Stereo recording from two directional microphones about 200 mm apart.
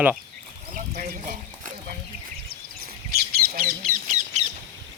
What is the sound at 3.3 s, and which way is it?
Bird, 45° right (ahead or behind).